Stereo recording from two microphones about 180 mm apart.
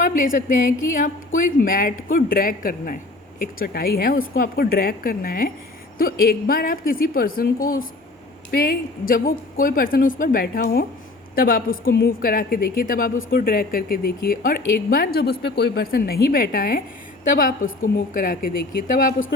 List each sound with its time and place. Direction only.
0.0 s a woman's voice: 50° left (ahead or behind)